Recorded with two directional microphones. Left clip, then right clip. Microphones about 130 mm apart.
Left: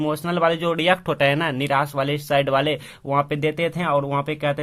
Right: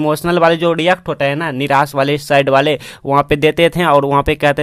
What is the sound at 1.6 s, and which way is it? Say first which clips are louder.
Speech: right 8 dB; 45° right (ahead or behind).